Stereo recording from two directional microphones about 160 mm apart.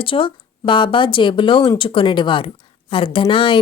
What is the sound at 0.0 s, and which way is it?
A woman's voice, 35° left (ahead or behind).